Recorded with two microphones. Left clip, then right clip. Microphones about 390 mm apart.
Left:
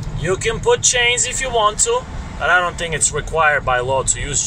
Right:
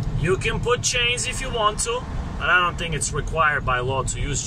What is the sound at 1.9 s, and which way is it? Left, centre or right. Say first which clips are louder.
Speech: left 7 dB; left.